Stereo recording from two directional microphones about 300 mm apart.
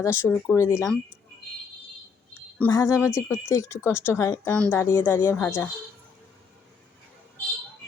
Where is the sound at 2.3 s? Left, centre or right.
Centre.